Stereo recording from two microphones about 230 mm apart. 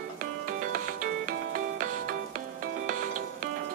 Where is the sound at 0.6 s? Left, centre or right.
Right.